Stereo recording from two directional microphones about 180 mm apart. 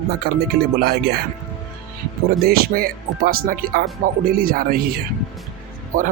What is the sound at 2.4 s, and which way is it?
Speech, 55° right (ahead or behind).